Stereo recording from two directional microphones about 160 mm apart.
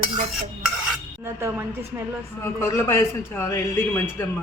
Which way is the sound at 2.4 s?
15° left (ahead or behind).